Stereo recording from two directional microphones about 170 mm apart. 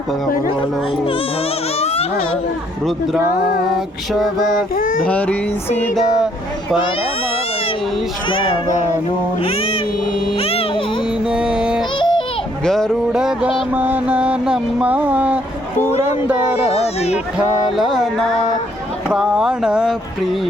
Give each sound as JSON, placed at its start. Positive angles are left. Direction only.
{"t": 1.8, "sound": "a sound", "side_deg": 35}
{"t": 4.1, "sound": "music", "side_deg": 0}
{"t": 4.7, "sound": "child singing", "side_deg": 55}
{"t": 5.0, "sound": "music", "side_deg": 10}
{"t": 8.3, "sound": "speech", "side_deg": 30}
{"t": 9.4, "sound": "cat", "side_deg": 35}
{"t": 10.3, "sound": "music", "side_deg": 35}
{"t": 11.3, "sound": "music", "side_deg": -5}
{"t": 11.9, "sound": "yodeling", "side_deg": 30}
{"t": 12.6, "sound": "music", "side_deg": 5}
{"t": 13.7, "sound": "a sound", "side_deg": -10}
{"t": 16.8, "sound": "speech", "side_deg": 40}
{"t": 17.3, "sound": "music", "side_deg": 0}